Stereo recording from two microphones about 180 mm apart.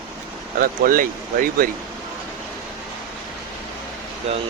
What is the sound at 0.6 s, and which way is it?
Speech, 50° right (ahead or behind).